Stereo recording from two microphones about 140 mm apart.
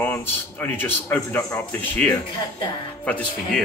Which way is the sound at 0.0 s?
15° left (ahead or behind).